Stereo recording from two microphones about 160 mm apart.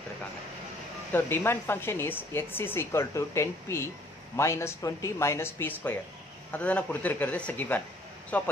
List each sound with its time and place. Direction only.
1.1 s a woman's voice: 15° left (ahead or behind)